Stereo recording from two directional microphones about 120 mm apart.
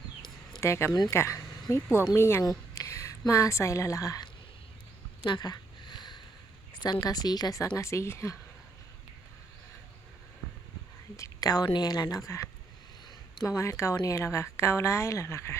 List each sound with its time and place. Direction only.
0.6 s a woman's voice: 20° left (ahead or behind)
5.2 s a sound: 35° left (ahead or behind)
6.8 s a woman's voice: 35° left (ahead or behind)
11.2 s a woman's voice: 30° left (ahead or behind)